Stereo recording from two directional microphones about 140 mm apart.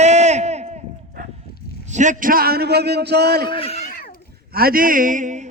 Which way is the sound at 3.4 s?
40° left (ahead or behind).